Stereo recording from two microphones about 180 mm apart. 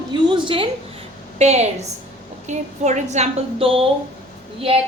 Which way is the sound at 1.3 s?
40° right (ahead or behind).